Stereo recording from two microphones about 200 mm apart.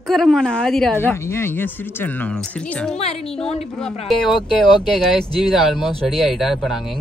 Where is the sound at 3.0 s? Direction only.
30° left (ahead or behind).